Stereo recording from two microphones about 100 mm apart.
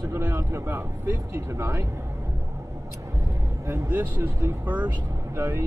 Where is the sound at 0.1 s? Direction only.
25° right (ahead or behind).